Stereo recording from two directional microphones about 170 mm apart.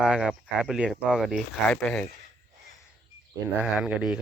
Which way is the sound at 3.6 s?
5° right (ahead or behind).